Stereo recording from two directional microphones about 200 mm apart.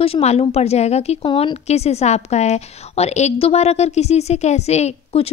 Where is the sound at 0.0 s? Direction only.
30° left (ahead or behind).